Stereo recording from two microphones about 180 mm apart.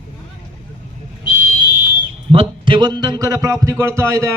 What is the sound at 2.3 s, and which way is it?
A man's voice, 30° right (ahead or behind).